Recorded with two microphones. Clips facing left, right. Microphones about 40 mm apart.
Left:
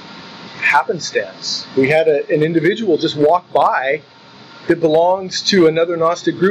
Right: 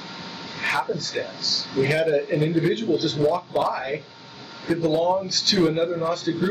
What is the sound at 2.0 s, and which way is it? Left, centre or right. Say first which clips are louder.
Speech: left 7 dB; left.